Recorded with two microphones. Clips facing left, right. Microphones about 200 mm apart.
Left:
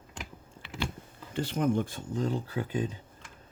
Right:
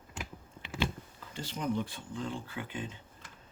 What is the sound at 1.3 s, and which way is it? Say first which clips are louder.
Speech: left 7 dB; 60° left (ahead or behind).